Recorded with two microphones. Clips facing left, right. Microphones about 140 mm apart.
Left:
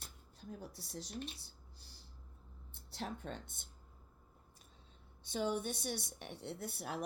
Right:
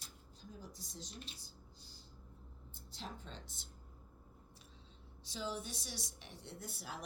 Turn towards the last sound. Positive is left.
turn(degrees=60)  # may be behind; listen again after turning